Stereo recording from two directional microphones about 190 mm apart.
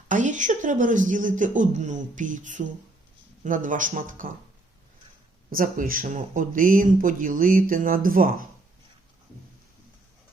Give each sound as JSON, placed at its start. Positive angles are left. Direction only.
{"t": 0.1, "sound": "speech", "side_deg": -40}
{"t": 5.5, "sound": "speech", "side_deg": -45}